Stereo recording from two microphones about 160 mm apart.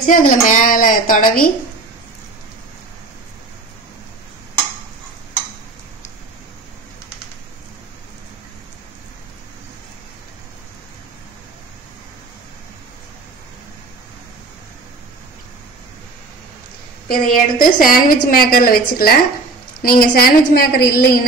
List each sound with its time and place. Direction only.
0.0 s a woman's voice: 60° left (ahead or behind)
17.1 s a woman's voice: 60° left (ahead or behind)